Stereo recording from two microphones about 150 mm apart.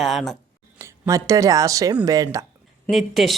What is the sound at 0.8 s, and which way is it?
Speech, 20° right (ahead or behind).